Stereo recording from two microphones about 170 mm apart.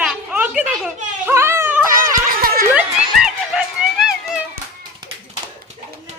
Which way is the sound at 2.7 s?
5° right (ahead or behind).